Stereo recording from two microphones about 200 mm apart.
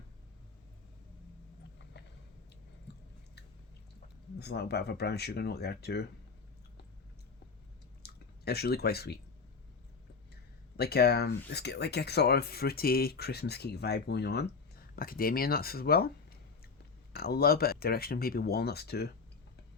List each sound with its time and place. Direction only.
2.9 s chewing: 55° left (ahead or behind)
4.4 s speech: 55° left (ahead or behind)
8.0 s a sound: 55° left (ahead or behind)
10.8 s speech: 55° left (ahead or behind)
17.2 s speech: 50° left (ahead or behind)